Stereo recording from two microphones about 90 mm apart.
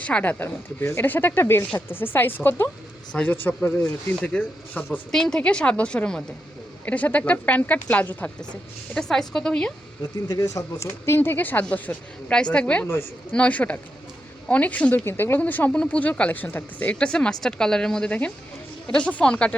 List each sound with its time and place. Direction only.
0.0 s speech: 15° left (ahead or behind)
3.1 s speech: 10° left (ahead or behind)
3.3 s speech: 25° left (ahead or behind)
9.0 s speech: 5° left (ahead or behind)
10.0 s speech: 45° left (ahead or behind); by 19.5 s 10° left (ahead or behind)